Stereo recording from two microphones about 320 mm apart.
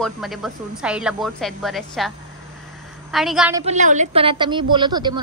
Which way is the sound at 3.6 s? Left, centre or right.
Right.